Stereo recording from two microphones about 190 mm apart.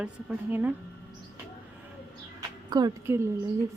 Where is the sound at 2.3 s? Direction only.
20° right (ahead or behind).